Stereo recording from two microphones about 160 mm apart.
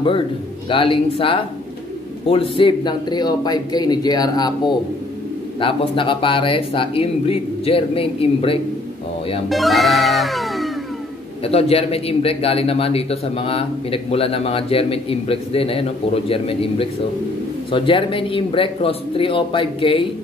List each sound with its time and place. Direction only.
0.7 s a man's voice: 35° left (ahead or behind)
9.5 s music: centre (ahead or behind)
11.4 s a man's voice: 40° left (ahead or behind)